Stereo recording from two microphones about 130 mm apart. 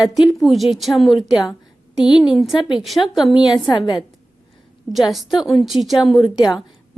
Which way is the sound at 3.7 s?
40° left (ahead or behind).